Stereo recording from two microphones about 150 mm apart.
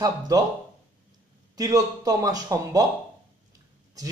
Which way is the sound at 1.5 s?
25° right (ahead or behind).